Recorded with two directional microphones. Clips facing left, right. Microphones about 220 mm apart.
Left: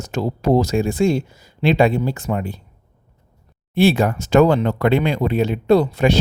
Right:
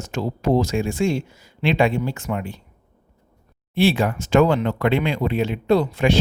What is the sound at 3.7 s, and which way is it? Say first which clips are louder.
Speech: left 3 dB; 45° left (ahead or behind).